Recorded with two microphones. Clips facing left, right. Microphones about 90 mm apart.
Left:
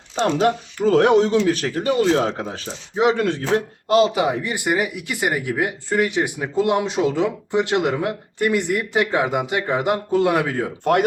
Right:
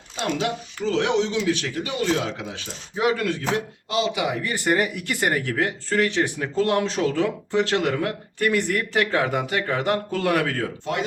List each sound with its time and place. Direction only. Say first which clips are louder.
0.2 s speech: left 7 dB; 40° left (ahead or behind)
2.9 s speech: left 4 dB; 25° left (ahead or behind)
3.8 s speech: left 8 dB; 45° left (ahead or behind)
4.4 s speech: left 1 dB; 15° left (ahead or behind)